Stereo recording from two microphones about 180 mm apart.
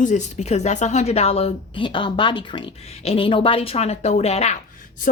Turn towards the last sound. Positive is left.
turn(degrees=45)  # may be behind; listen again after turning